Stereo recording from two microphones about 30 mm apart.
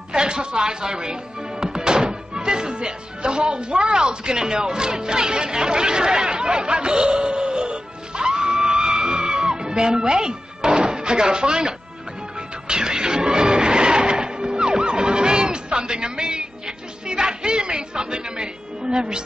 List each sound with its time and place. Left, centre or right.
0.1 s speech: right
1.6 s music: right